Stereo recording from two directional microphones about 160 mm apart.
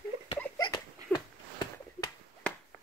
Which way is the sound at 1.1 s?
30° left (ahead or behind).